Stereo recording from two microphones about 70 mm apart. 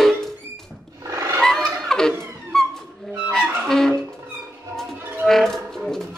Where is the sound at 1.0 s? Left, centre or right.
Right.